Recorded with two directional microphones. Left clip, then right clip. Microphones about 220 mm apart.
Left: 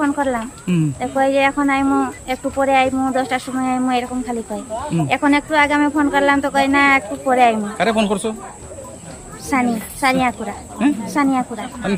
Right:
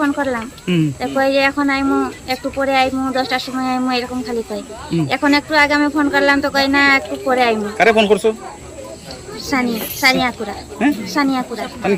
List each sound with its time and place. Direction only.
0.0 s speech: 5° left (ahead or behind)
9.5 s speech: 5° left (ahead or behind)